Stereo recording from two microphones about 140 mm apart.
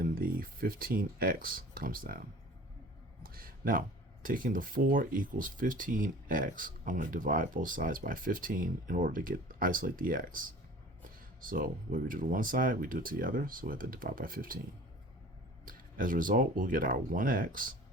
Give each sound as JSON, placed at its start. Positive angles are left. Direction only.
{"t": 0.0, "sound": "speech", "side_deg": -90}
{"t": 3.2, "sound": "speech", "side_deg": -90}
{"t": 15.6, "sound": "speech", "side_deg": -80}